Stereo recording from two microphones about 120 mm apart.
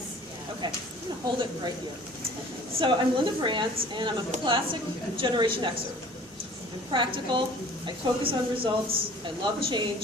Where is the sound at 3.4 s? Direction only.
40° right (ahead or behind).